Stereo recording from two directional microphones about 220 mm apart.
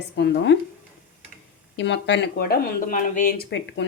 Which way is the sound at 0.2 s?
50° left (ahead or behind).